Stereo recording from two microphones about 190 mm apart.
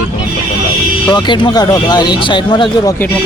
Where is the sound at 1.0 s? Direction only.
25° left (ahead or behind).